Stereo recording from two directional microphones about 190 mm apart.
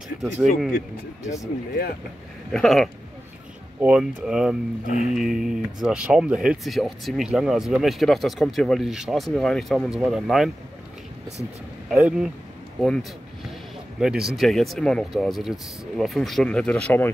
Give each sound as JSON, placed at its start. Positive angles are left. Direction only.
{"t": 0.2, "sound": "speech", "side_deg": 0}
{"t": 2.5, "sound": "speech", "side_deg": 0}
{"t": 4.8, "sound": "music", "side_deg": 40}
{"t": 5.1, "sound": "speech", "side_deg": 0}
{"t": 11.9, "sound": "speech", "side_deg": 0}
{"t": 13.9, "sound": "speech", "side_deg": -5}